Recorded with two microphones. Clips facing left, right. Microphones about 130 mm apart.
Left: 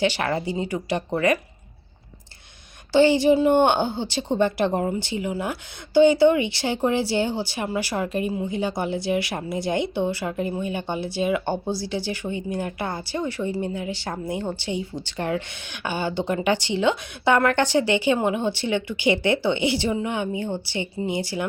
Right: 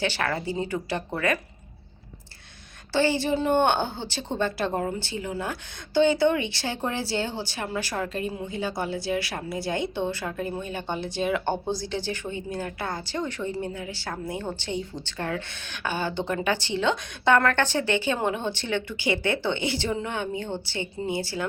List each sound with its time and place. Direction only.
0.0 s speech: 15° left (ahead or behind)
2.9 s speech: 15° left (ahead or behind)